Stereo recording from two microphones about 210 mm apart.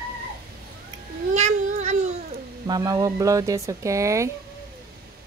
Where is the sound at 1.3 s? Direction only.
35° right (ahead or behind).